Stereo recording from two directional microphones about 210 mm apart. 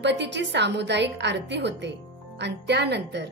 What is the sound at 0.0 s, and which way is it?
Speech, 55° right (ahead or behind).